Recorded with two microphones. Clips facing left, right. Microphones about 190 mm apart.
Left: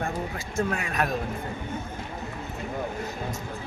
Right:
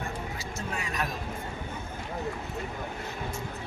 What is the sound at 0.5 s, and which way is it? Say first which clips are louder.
Speech: left 8 dB; 55° left (ahead or behind).